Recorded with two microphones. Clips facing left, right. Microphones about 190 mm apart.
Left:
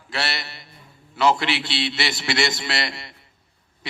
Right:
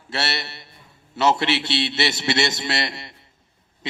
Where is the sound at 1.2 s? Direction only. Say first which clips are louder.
Right 1 dB; 25° right (ahead or behind).